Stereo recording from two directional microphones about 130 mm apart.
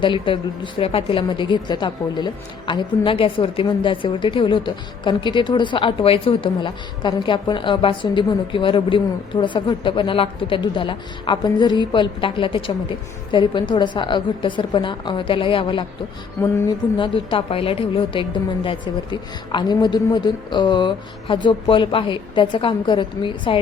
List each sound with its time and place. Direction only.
0.0 s a woman's voice: 40° left (ahead or behind)
16.4 s a sound: 25° left (ahead or behind)
17.0 s a woman's voice: 40° left (ahead or behind)